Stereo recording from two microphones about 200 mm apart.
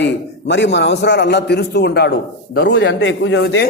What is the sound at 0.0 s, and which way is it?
A man's voice, 60° left (ahead or behind).